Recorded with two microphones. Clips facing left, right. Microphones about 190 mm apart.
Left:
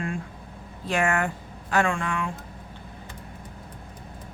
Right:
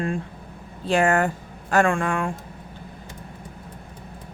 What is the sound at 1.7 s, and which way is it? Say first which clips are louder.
Speech: right 4 dB; 50° right (ahead or behind).